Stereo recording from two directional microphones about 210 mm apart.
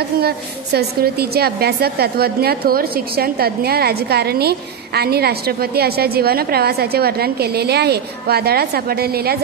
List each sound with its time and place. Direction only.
0.7 s a woman's voice: 50° right (ahead or behind)